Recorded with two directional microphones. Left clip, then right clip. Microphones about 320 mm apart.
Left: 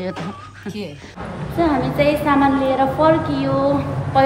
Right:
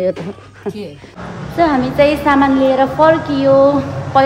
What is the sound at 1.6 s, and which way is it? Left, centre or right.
A woman's voice, centre.